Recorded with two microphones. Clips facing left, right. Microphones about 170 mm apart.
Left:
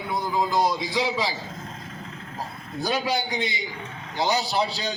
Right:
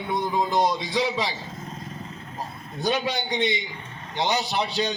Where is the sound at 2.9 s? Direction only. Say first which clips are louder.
Left 2 dB; 30° left (ahead or behind).